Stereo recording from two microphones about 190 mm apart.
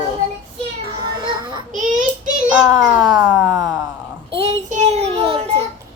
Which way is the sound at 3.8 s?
30° right (ahead or behind).